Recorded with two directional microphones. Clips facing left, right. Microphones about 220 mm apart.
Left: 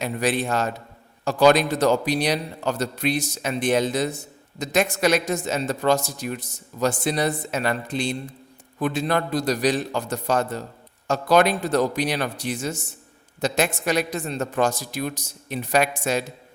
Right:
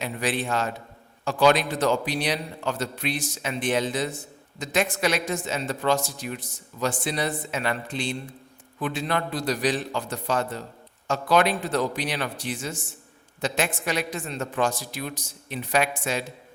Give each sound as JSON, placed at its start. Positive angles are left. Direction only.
{"t": 0.0, "sound": "a man's voice", "side_deg": 40}